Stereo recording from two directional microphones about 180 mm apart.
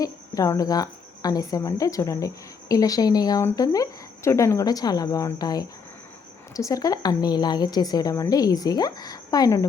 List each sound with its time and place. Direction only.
0.0 s a woman's voice: 20° left (ahead or behind)